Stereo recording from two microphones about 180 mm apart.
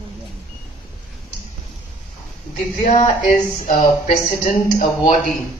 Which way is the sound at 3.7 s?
40° left (ahead or behind).